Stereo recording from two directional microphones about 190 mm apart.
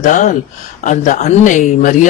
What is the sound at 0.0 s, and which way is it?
A man's voice, 40° left (ahead or behind).